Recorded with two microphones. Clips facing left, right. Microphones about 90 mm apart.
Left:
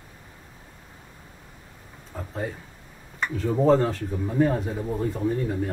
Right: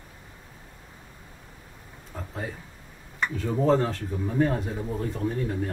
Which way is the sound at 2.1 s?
5° left (ahead or behind).